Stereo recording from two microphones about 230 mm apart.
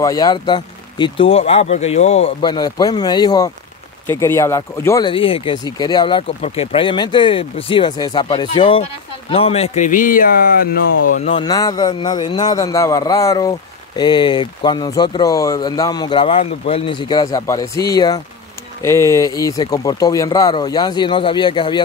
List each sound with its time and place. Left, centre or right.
0.0 s speech: centre